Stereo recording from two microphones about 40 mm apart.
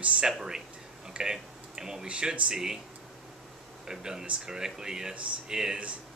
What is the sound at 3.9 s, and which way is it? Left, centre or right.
Speech, centre.